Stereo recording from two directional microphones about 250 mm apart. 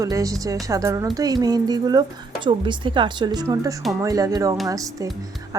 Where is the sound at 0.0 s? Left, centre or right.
Centre.